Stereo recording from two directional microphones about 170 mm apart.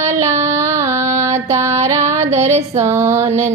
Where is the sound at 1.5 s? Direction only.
15° right (ahead or behind).